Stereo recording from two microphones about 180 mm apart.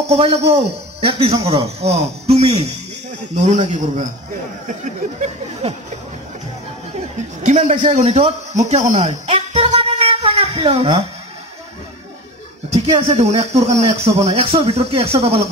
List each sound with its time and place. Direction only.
0.4 s a man's voice: 70° right (ahead or behind)
1.0 s speech: 35° right (ahead or behind)
7.4 s speech: 40° right (ahead or behind)
13.1 s speech: 35° right (ahead or behind)